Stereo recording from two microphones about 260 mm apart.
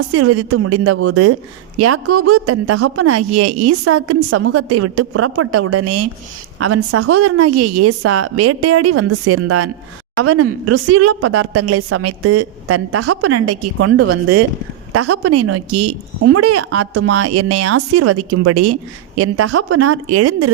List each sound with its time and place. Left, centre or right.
0.1 s a woman's voice: right